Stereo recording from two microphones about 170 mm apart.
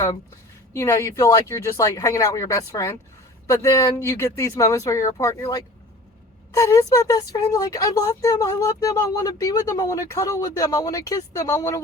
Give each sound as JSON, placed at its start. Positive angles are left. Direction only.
{"t": 0.7, "sound": "a woman's voice", "side_deg": 15}